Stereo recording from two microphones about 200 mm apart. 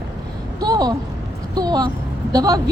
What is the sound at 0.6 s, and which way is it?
Speech, 20° right (ahead or behind).